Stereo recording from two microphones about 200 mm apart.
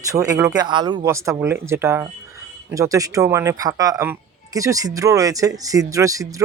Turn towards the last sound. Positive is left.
turn(degrees=-15)  # may be behind; listen again after turning